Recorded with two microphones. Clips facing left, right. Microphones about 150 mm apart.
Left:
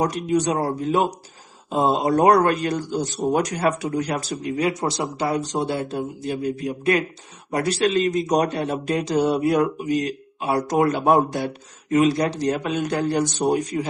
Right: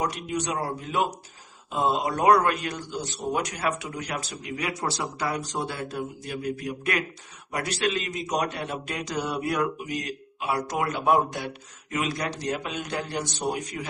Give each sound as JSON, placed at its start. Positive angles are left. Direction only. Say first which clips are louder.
{"t": 0.0, "sound": "a man's voice", "louder": "left 8 dB", "side_deg": 40}
{"t": 12.5, "sound": "a man's voice", "louder": "left 8 dB", "side_deg": 45}